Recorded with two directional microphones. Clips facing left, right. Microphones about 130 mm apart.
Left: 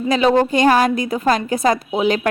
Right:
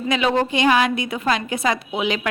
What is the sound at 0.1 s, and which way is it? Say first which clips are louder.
A woman's voice: left 5 dB; 35° left (ahead or behind).